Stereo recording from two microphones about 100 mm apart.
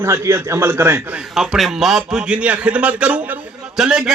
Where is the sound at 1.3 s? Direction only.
5° right (ahead or behind).